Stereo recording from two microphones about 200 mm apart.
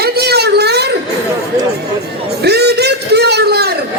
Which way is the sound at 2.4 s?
55° right (ahead or behind).